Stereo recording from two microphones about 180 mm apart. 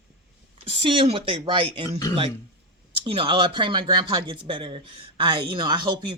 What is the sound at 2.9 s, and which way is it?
Speech, 30° right (ahead or behind).